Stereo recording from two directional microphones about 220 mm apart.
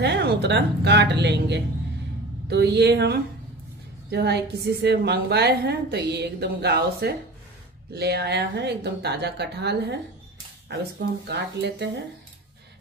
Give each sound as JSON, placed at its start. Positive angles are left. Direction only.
{"t": 0.0, "sound": "a woman's voice", "side_deg": -50}